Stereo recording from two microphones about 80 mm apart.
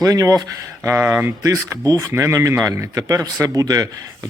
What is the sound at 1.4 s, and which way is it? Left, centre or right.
Speech, right.